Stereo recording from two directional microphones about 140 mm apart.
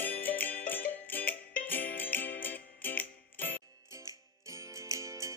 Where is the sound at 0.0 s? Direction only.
15° left (ahead or behind).